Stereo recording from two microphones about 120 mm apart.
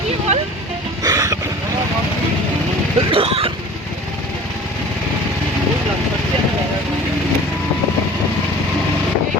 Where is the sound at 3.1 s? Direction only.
50° right (ahead or behind).